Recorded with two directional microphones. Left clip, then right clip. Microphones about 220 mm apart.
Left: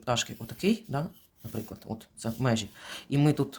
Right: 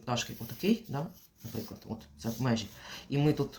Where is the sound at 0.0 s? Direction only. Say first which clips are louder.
Left 5 dB; 55° left (ahead or behind).